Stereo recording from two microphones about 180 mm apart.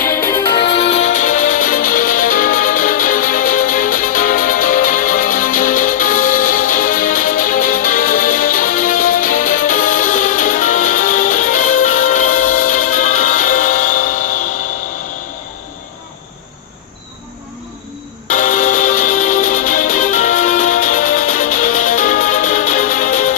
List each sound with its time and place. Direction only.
0.6 s music: 40° left (ahead or behind)
18.3 s music: 45° left (ahead or behind)